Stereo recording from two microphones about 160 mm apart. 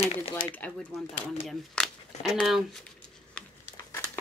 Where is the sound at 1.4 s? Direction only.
Centre (ahead or behind).